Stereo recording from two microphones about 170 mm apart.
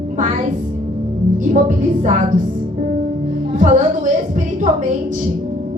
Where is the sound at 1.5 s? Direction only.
45° right (ahead or behind).